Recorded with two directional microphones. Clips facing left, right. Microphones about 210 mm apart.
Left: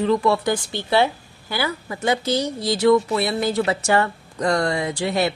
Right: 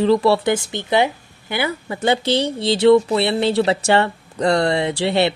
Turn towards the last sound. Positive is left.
turn(degrees=-30)  # may be behind; listen again after turning